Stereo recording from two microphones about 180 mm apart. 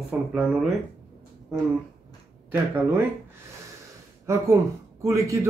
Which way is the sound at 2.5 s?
10° right (ahead or behind).